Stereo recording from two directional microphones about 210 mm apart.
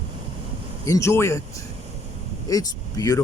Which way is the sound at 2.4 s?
15° left (ahead or behind).